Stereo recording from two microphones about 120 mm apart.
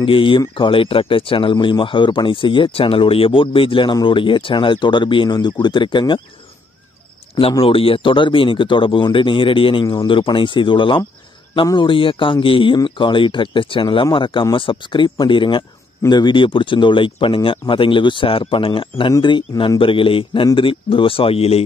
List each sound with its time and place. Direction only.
0.0 s speech: 45° left (ahead or behind)
7.6 s a man's voice: 50° left (ahead or behind)